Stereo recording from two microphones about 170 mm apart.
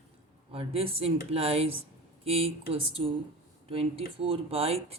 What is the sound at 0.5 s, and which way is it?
Speech, 35° right (ahead or behind).